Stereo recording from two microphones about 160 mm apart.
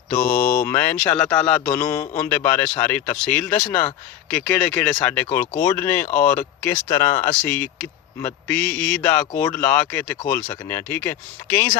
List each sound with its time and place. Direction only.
0.2 s speech: 60° left (ahead or behind)
0.6 s a man's voice: 15° left (ahead or behind)
6.8 s a man's voice: 20° left (ahead or behind)